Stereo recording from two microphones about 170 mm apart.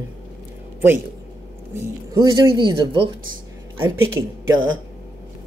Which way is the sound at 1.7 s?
15° right (ahead or behind).